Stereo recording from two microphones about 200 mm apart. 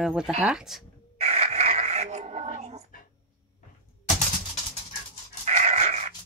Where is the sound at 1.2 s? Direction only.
35° right (ahead or behind).